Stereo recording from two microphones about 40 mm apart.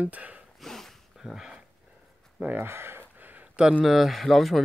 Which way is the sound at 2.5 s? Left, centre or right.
Right.